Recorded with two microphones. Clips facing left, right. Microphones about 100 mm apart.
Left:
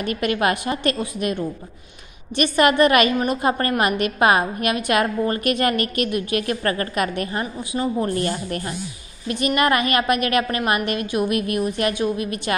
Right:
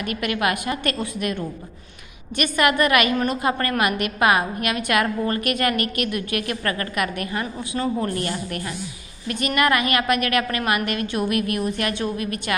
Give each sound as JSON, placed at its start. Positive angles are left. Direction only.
{"t": 0.0, "sound": "a woman's voice", "side_deg": 30}
{"t": 0.9, "sound": "a woman's voice", "side_deg": 15}
{"t": 2.3, "sound": "a woman's voice", "side_deg": 25}
{"t": 7.7, "sound": "a woman's voice", "side_deg": 15}
{"t": 8.1, "sound": "a woman's voice", "side_deg": 30}